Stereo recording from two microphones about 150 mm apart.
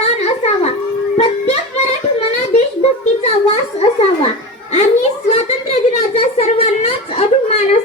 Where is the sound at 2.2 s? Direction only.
45° left (ahead or behind).